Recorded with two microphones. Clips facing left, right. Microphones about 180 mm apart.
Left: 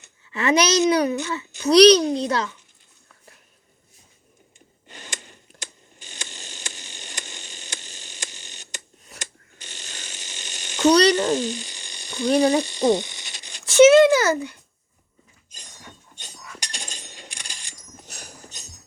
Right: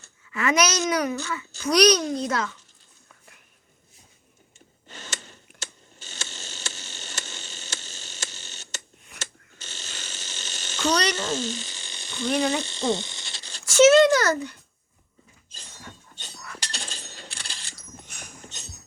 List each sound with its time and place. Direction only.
0.3 s a child's voice: 35° left (ahead or behind)
4.9 s gasp: 15° left (ahead or behind)
5.5 s a sound: 15° left (ahead or behind)
9.1 s ratchet: 15° left (ahead or behind)
10.9 s a child's voice: 35° left (ahead or behind)
11.2 s a sound: 15° left (ahead or behind)
12.6 s speech: 15° left (ahead or behind)
15.5 s coin: 15° left (ahead or behind)
18.0 s dog: 35° left (ahead or behind)